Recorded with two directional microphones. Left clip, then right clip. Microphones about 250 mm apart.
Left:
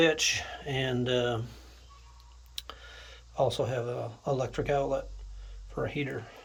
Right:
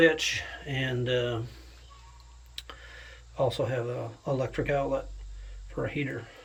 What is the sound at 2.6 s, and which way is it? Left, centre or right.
Speech, centre.